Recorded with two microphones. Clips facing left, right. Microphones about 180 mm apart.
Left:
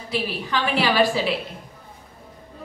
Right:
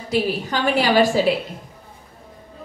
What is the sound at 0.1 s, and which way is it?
A woman's voice, 45° right (ahead or behind).